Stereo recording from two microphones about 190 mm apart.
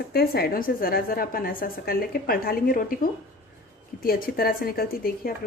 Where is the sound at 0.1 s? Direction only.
55° left (ahead or behind).